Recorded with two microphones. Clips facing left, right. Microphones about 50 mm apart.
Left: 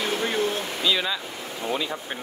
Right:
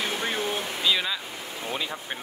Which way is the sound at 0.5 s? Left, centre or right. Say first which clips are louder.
Left 1 dB; centre.